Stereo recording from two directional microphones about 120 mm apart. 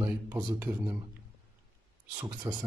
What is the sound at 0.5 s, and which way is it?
Speech, 15° right (ahead or behind).